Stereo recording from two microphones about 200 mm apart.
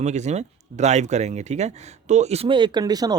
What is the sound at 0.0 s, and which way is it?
Speech, 35° right (ahead or behind).